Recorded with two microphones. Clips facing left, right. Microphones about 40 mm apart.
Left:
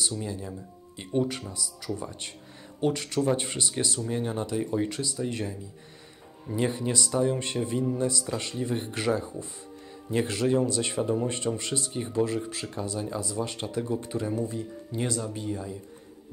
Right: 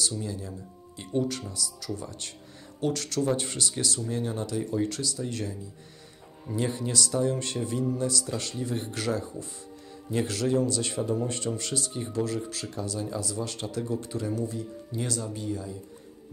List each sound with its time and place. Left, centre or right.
0.1 s speech: left